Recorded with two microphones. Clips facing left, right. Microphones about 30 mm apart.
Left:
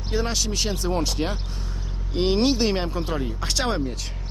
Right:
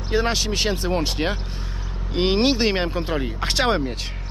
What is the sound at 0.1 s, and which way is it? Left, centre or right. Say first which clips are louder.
Speech: right 4 dB; right.